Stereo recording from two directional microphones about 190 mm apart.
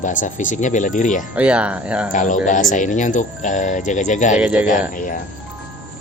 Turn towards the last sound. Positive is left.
turn(degrees=45)  # may be behind; listen again after turning